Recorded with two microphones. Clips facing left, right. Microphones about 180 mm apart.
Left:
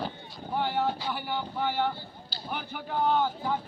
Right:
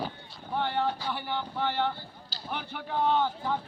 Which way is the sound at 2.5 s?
5° left (ahead or behind).